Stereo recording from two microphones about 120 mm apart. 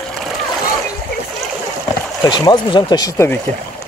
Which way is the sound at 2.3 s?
40° left (ahead or behind).